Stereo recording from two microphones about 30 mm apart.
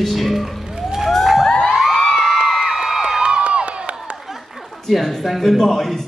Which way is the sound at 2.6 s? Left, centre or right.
Right.